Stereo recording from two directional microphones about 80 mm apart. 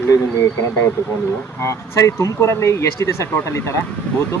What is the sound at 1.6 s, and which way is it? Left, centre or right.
Speech, left.